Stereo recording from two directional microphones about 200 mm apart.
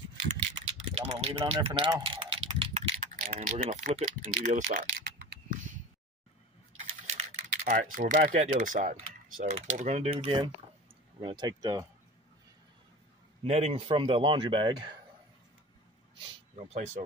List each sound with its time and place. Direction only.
0.9 s speech: 30° right (ahead or behind)
1.7 s typing: 15° right (ahead or behind)
3.0 s speech: 40° right (ahead or behind)
7.1 s speech: 35° right (ahead or behind); by 11.9 s 20° right (ahead or behind)
13.4 s speech: 30° right (ahead or behind)
16.5 s speech: 35° right (ahead or behind)